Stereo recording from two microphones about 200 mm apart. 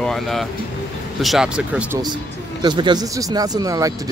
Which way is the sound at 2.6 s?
25° right (ahead or behind).